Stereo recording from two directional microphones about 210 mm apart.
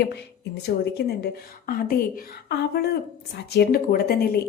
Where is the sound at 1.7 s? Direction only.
45° left (ahead or behind).